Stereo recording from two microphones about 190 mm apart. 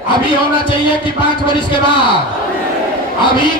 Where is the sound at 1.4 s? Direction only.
25° left (ahead or behind).